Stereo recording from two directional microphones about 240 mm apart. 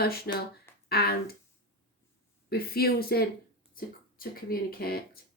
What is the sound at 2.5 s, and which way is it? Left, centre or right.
A woman's voice, left.